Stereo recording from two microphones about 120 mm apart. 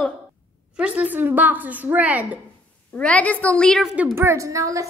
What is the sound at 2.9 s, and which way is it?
A woman's voice, 10° left (ahead or behind).